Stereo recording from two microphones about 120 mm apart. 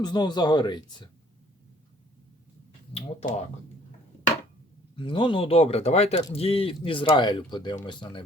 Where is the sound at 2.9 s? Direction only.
60° left (ahead or behind).